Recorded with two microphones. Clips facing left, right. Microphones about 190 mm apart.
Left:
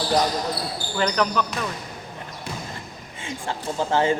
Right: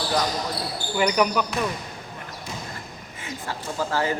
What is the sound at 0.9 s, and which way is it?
Speech, 10° right (ahead or behind).